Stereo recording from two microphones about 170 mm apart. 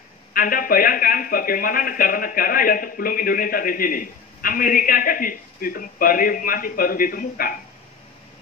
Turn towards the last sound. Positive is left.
turn(degrees=60)  # may be behind; listen again after turning